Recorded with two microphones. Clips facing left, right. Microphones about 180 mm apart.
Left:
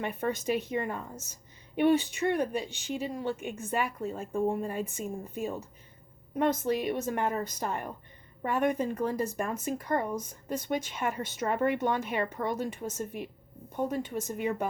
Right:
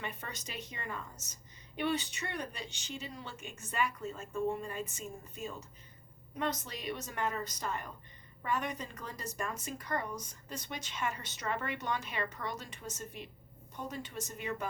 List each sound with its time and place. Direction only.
0.0 s speech: 55° left (ahead or behind)